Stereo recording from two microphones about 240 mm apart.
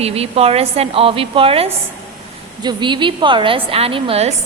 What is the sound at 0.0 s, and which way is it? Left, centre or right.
A woman's voice, right.